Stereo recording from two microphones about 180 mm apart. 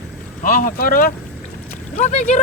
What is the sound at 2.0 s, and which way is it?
Speech, 40° left (ahead or behind).